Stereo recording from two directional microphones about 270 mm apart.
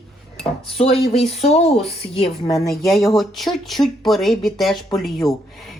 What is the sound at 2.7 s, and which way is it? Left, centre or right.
Speech, centre.